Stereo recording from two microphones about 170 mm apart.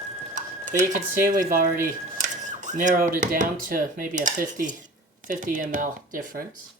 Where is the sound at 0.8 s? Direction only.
50° right (ahead or behind).